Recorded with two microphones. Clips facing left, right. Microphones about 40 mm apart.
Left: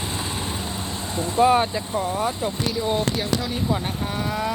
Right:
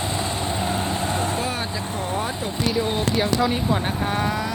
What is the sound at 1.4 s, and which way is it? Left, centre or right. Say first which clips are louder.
Speech: left 10 dB; centre.